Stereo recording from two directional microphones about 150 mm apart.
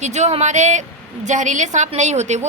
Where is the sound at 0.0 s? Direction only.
50° right (ahead or behind).